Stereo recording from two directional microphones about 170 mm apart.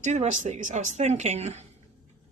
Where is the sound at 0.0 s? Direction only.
45° right (ahead or behind).